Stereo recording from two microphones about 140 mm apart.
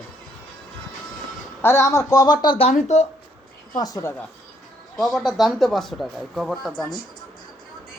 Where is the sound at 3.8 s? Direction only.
25° left (ahead or behind).